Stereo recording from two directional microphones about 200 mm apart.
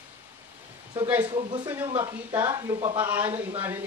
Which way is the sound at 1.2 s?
25° right (ahead or behind).